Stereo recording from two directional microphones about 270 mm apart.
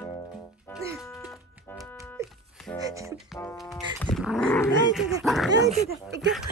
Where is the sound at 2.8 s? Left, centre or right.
Centre.